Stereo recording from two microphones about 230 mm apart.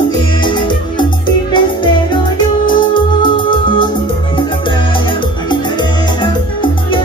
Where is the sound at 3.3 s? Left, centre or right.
Left.